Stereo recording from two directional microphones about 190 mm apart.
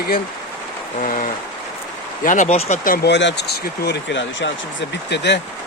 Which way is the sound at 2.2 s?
40° left (ahead or behind).